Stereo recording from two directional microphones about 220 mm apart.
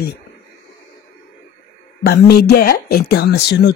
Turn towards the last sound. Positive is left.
turn(degrees=50)  # may be behind; listen again after turning